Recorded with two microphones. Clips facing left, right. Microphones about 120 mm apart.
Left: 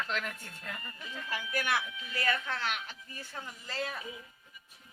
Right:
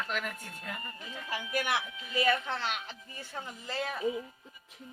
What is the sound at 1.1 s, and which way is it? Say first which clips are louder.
Music: even; 20° right (ahead or behind).